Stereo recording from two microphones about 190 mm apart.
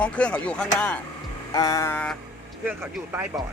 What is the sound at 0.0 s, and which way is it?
Speech, 5° left (ahead or behind).